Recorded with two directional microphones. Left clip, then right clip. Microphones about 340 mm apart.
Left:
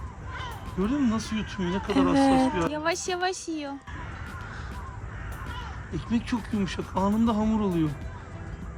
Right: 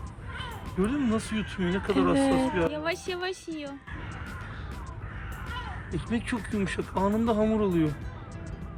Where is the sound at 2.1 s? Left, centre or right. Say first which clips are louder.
Left 3 dB; centre.